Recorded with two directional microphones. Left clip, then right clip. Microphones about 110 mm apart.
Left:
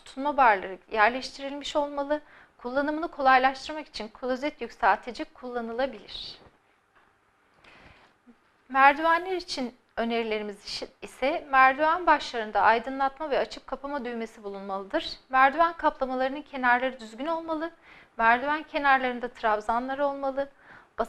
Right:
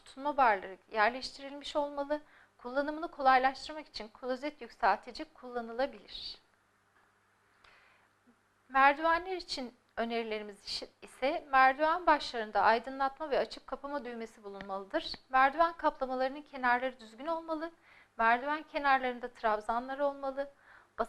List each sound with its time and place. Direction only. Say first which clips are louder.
0.0 s a woman's voice: left 7 dB; 30° left (ahead or behind)
5.7 s a woman's voice: left 4 dB; 15° left (ahead or behind)
8.7 s a woman's voice: left 6 dB; 30° left (ahead or behind)